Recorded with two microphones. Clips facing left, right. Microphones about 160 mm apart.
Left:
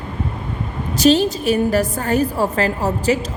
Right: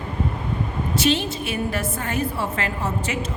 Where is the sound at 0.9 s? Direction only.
40° left (ahead or behind).